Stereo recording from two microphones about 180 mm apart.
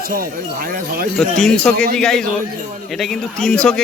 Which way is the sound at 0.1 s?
55° right (ahead or behind).